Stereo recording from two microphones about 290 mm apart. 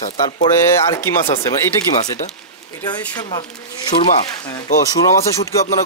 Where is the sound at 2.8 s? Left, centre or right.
Centre.